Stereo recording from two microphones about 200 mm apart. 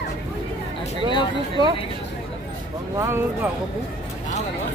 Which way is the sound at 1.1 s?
25° left (ahead or behind).